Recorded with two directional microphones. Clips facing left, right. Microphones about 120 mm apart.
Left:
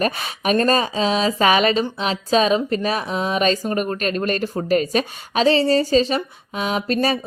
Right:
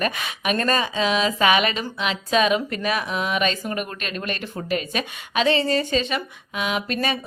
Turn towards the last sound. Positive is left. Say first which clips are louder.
# left 4 dB
turn(degrees=35)  # may be behind; listen again after turning